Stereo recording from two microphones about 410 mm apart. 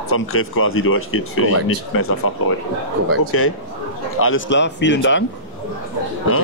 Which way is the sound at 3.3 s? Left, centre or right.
Left.